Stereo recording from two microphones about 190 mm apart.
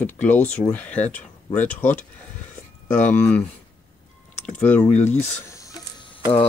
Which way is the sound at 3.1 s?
10° left (ahead or behind).